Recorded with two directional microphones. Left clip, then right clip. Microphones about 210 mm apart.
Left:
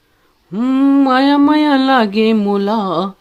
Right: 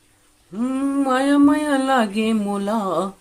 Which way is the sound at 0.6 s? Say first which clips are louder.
Left 9 dB; 35° left (ahead or behind).